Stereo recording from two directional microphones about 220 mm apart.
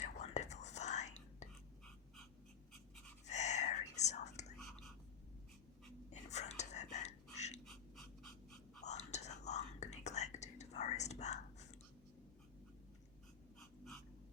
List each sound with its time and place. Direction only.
0.0 s whispering: 30° left (ahead or behind)
3.2 s whispering: 30° left (ahead or behind)
6.1 s whispering: 30° left (ahead or behind)
7.6 s a sound: centre (ahead or behind)
8.8 s whispering: 30° left (ahead or behind)